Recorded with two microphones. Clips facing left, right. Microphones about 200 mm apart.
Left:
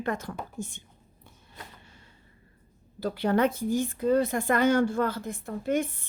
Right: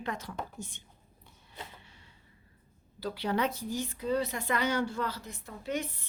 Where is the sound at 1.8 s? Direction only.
45° left (ahead or behind).